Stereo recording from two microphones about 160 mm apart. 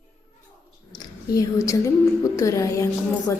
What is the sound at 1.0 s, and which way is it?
A woman's voice, 20° left (ahead or behind).